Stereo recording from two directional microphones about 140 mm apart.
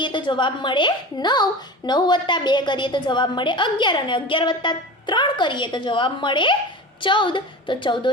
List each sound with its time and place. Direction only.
0.0 s a woman's voice: 35° left (ahead or behind)